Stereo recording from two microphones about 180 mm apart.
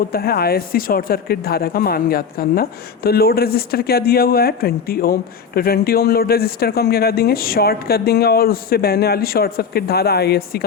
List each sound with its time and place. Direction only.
0.1 s speech: 60° left (ahead or behind)